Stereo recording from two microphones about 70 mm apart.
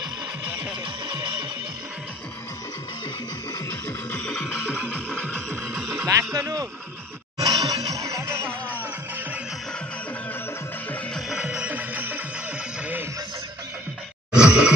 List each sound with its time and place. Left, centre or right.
3.8 s music: left
4.6 s music: centre
5.3 s music: centre
6.0 s speech: right
7.4 s music: right
8.3 s music: right
11.1 s music: centre
11.6 s music: right
14.3 s a sound: centre